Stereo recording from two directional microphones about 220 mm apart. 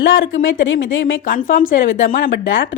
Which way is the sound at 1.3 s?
40° left (ahead or behind).